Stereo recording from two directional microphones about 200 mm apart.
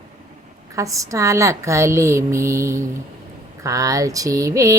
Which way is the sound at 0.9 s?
15° right (ahead or behind).